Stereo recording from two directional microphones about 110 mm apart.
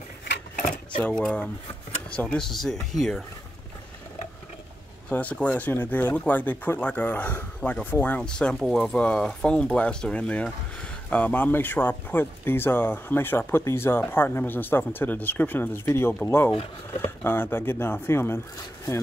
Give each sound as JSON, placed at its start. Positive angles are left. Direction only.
{"t": 1.2, "sound": "speech", "side_deg": 10}
{"t": 5.1, "sound": "speech", "side_deg": 15}